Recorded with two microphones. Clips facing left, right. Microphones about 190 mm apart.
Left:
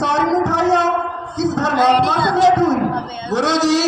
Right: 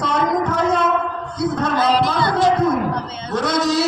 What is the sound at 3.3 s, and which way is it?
Male singing, 70° left (ahead or behind).